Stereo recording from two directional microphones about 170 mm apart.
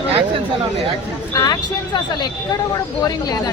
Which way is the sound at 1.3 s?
20° left (ahead or behind).